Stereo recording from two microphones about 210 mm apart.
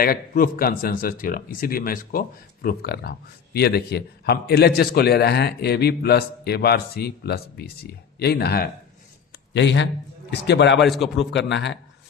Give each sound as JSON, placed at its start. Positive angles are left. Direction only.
{"t": 0.0, "sound": "a man's voice", "side_deg": 45}
{"t": 10.8, "sound": "a man's voice", "side_deg": 0}
{"t": 11.3, "sound": "a man's voice", "side_deg": 55}